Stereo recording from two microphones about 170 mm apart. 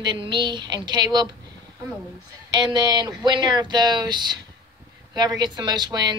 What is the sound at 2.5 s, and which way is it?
A woman's voice, 25° right (ahead or behind).